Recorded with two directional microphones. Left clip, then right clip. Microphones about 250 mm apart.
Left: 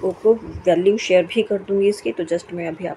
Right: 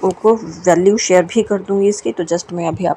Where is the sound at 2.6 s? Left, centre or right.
Right.